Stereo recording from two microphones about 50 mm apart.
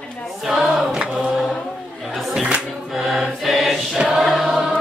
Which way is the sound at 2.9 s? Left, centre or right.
Centre.